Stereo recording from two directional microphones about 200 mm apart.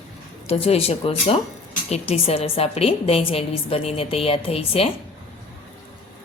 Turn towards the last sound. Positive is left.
turn(degrees=30)  # may be behind; listen again after turning